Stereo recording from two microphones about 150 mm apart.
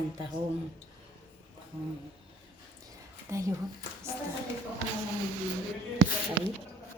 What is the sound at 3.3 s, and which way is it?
Speech, 20° right (ahead or behind).